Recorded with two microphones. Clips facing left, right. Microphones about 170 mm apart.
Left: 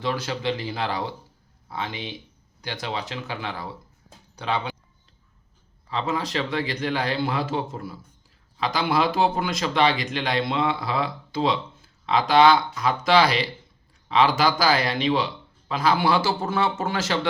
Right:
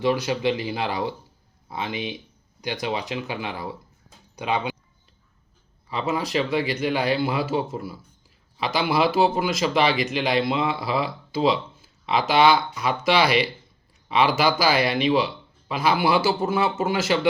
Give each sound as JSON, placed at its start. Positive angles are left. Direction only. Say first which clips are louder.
{"t": 0.0, "sound": "speech", "louder": "right 5 dB", "side_deg": -15}
{"t": 5.9, "sound": "speech", "louder": "right 2 dB", "side_deg": -10}